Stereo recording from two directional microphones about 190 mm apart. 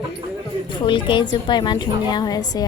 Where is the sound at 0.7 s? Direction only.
25° left (ahead or behind).